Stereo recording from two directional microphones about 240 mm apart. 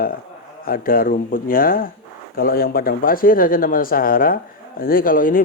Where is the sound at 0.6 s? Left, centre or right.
Left.